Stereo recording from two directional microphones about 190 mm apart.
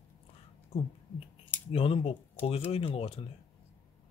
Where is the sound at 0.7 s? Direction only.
30° left (ahead or behind).